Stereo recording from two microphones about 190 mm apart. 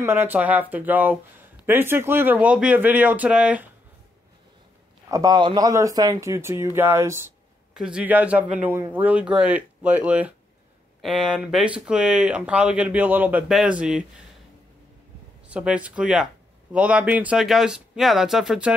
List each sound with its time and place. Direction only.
0.0 s speech: 10° right (ahead or behind)
5.1 s speech: 20° right (ahead or behind); by 14.0 s 5° right (ahead or behind)
15.4 s speech: 5° right (ahead or behind)